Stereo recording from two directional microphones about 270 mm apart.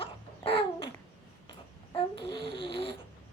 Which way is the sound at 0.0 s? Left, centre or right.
Centre.